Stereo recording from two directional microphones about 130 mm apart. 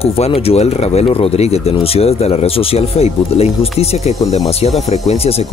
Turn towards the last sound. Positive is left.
turn(degrees=50)  # may be behind; listen again after turning